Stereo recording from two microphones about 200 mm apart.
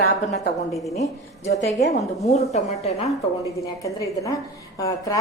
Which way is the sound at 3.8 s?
15° left (ahead or behind).